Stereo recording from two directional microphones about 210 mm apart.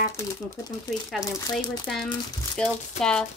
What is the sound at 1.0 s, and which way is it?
Speech, centre (ahead or behind).